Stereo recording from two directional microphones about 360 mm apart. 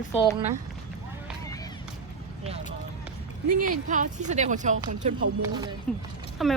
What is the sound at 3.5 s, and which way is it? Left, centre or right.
Speech, right.